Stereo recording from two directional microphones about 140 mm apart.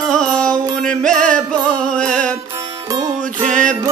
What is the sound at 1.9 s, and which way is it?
Music, 5° left (ahead or behind).